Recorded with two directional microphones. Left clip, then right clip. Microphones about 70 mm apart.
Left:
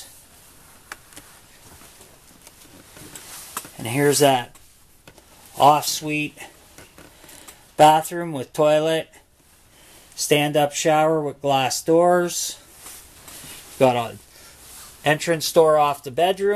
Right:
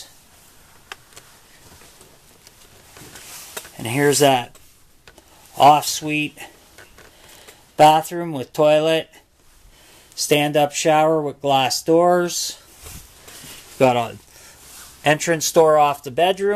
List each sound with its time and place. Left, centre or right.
3.7 s a sound: right
4.1 s speech: right
5.6 s speech: right
7.7 s speech: centre
10.1 s speech: centre
13.7 s a sound: right
15.0 s speech: right